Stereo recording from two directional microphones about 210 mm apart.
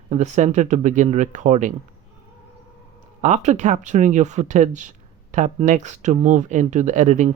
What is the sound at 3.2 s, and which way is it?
Speech, 35° right (ahead or behind).